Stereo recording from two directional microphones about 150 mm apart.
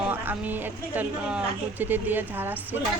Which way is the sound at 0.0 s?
10° right (ahead or behind).